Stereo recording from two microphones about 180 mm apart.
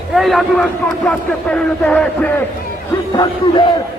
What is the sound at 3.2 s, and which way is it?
Speech, 25° left (ahead or behind).